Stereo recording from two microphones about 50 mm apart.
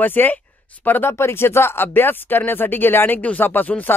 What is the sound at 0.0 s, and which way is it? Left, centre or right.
Speech, left.